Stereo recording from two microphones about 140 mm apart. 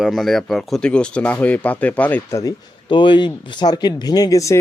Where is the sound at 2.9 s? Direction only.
35° left (ahead or behind).